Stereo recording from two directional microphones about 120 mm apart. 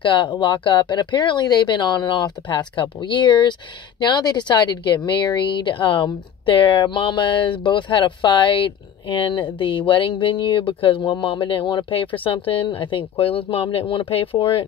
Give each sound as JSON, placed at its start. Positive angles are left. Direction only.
{"t": 0.0, "sound": "speech", "side_deg": 40}